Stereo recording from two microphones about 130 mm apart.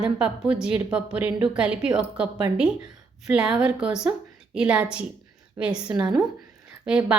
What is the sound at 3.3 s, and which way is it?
A woman's voice, 10° right (ahead or behind).